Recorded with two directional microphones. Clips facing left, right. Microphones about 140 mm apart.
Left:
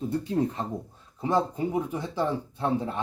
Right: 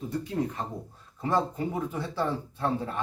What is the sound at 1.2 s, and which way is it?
Speech, 15° left (ahead or behind).